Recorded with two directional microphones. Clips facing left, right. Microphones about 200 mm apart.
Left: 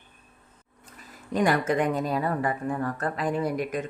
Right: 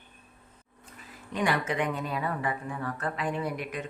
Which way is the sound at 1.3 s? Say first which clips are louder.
Left 5 dB; 40° left (ahead or behind).